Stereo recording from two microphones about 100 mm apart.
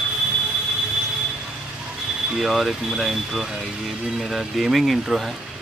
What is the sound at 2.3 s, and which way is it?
Speech, centre (ahead or behind).